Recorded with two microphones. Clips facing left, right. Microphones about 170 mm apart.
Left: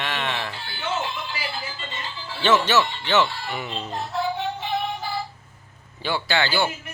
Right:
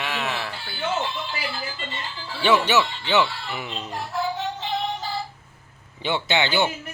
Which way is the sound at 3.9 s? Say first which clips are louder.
Left 1 dB; 20° left (ahead or behind).